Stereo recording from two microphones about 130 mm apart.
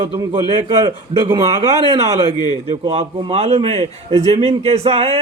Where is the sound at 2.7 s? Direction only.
50° right (ahead or behind).